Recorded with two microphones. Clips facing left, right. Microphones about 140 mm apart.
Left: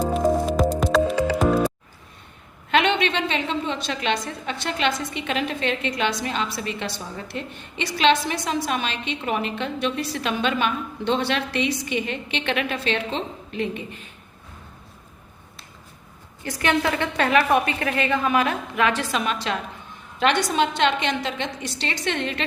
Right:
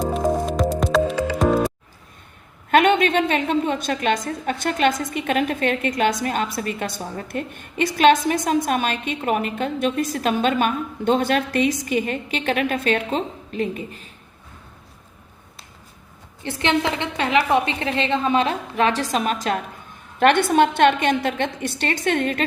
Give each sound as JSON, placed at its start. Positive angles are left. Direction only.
{"t": 0.0, "sound": "music", "side_deg": 0}
{"t": 2.6, "sound": "a woman's voice", "side_deg": -50}
{"t": 16.4, "sound": "a woman's voice", "side_deg": -25}